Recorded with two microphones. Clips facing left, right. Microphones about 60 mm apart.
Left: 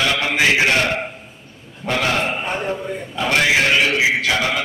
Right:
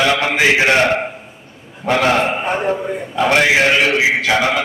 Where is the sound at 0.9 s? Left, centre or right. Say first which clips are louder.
Right 5 dB; centre.